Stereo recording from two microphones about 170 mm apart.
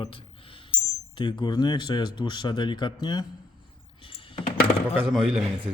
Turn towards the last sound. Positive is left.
turn(degrees=0)  # may be behind; listen again after turning